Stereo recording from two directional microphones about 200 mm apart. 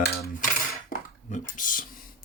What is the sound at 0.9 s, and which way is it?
Dishes, 40° left (ahead or behind).